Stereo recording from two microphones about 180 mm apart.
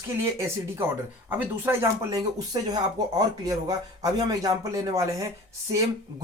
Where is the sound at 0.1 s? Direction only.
15° right (ahead or behind).